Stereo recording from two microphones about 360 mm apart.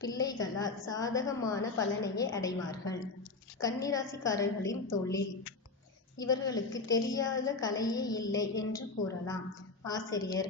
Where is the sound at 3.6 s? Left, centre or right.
Centre.